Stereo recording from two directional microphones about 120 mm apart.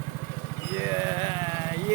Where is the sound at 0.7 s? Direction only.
25° right (ahead or behind).